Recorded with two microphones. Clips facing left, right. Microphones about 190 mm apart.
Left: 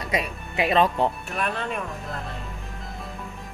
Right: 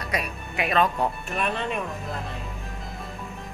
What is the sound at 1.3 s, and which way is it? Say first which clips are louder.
Speech: right 1 dB; centre (ahead or behind).